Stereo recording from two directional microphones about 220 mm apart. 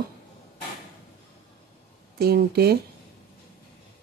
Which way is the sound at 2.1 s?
45° right (ahead or behind).